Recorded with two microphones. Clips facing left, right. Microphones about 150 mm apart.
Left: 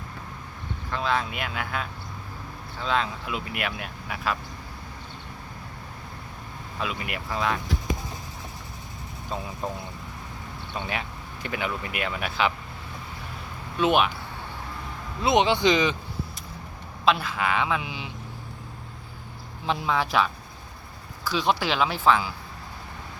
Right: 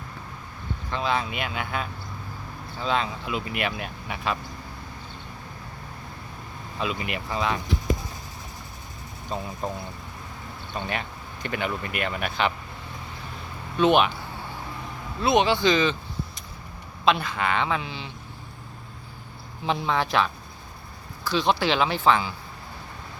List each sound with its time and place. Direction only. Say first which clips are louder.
0.9 s speech: even; centre (ahead or behind)
6.7 s speech: right 2 dB; centre (ahead or behind)
10.8 s speech: right 1 dB; 5° left (ahead or behind)
13.7 s speech: right 2 dB; 5° left (ahead or behind)
15.2 s speech: even; 20° left (ahead or behind)
17.1 s speech: right 1 dB; centre (ahead or behind)
19.6 s speech: right 1 dB; centre (ahead or behind)